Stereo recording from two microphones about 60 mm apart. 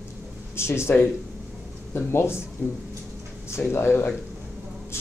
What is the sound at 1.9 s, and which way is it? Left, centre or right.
Speech, left.